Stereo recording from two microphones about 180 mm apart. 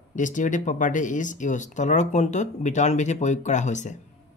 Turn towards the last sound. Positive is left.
turn(degrees=40)  # may be behind; listen again after turning